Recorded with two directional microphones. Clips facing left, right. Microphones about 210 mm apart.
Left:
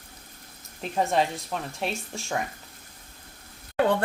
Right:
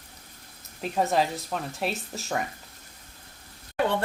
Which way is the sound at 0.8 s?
Centre (ahead or behind).